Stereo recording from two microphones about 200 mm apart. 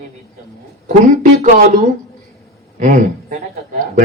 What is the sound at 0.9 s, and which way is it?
Speech, 40° right (ahead or behind).